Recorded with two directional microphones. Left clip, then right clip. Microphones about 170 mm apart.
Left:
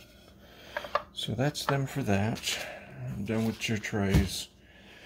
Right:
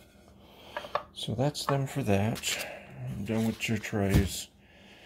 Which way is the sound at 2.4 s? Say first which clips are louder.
Even; 15° right (ahead or behind).